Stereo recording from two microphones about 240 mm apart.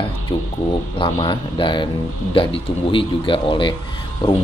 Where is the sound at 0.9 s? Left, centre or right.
Left.